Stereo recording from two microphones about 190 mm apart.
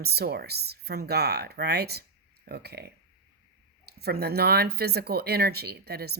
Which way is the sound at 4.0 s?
55° right (ahead or behind).